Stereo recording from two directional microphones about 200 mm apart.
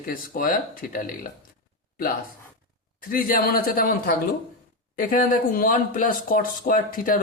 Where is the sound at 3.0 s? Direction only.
45° left (ahead or behind).